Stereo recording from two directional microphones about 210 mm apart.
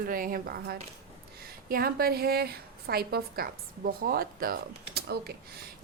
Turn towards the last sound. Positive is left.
turn(degrees=-50)  # may be behind; listen again after turning